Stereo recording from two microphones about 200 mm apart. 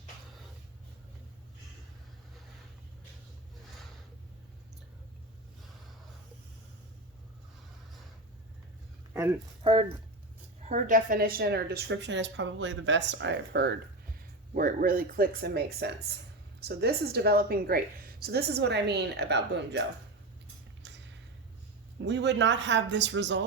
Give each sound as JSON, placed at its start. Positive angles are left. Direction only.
{"t": 9.6, "sound": "speech", "side_deg": -25}
{"t": 10.7, "sound": "a woman's voice", "side_deg": -40}
{"t": 14.5, "sound": "a woman's voice", "side_deg": -45}
{"t": 20.8, "sound": "a sound", "side_deg": -60}
{"t": 22.0, "sound": "a woman's voice", "side_deg": -60}